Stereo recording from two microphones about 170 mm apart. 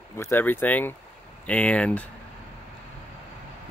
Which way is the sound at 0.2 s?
10° left (ahead or behind).